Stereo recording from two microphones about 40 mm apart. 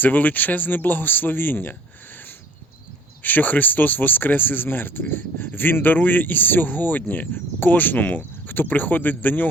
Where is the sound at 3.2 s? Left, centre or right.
Left.